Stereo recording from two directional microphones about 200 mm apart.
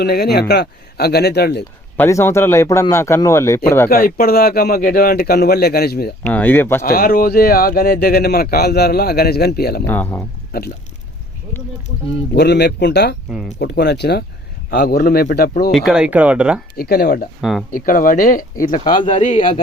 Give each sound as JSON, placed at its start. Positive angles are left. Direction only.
{"t": 0.0, "sound": "speech", "side_deg": 55}
{"t": 2.0, "sound": "speech", "side_deg": 15}
{"t": 3.8, "sound": "speech", "side_deg": 50}
{"t": 6.2, "sound": "speech", "side_deg": 10}
{"t": 6.9, "sound": "speech", "side_deg": 45}
{"t": 9.8, "sound": "speech", "side_deg": 10}
{"t": 10.5, "sound": "speech", "side_deg": 50}
{"t": 12.3, "sound": "speech", "side_deg": 55}
{"t": 15.7, "sound": "speech", "side_deg": 0}
{"t": 16.7, "sound": "speech", "side_deg": 50}